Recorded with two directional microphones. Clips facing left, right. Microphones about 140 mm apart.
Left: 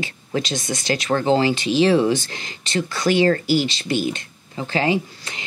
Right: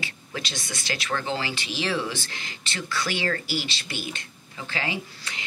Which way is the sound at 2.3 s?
35° left (ahead or behind).